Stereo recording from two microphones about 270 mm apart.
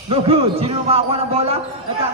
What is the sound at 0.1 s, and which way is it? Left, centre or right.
A man's voice, right.